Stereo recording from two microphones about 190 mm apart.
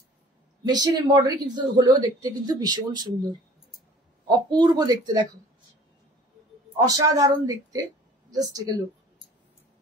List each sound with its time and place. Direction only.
0.7 s speech: 20° right (ahead or behind)
6.8 s speech: 20° right (ahead or behind)